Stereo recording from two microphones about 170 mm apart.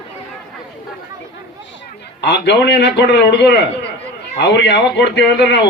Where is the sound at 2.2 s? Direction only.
90° left.